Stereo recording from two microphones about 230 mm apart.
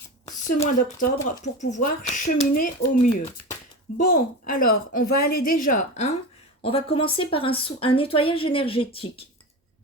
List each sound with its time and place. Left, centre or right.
0.6 s a woman's voice: left